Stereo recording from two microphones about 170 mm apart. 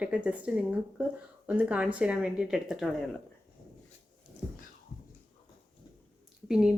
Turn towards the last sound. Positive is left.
turn(degrees=-5)  # may be behind; listen again after turning